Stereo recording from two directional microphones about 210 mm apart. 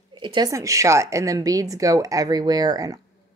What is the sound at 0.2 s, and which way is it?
Speech, 20° right (ahead or behind).